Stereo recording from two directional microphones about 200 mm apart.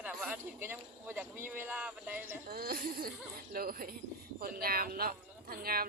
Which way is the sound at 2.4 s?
50° right (ahead or behind).